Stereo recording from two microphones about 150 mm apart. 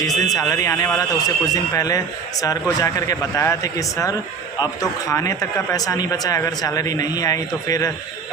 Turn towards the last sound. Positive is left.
turn(degrees=25)  # may be behind; listen again after turning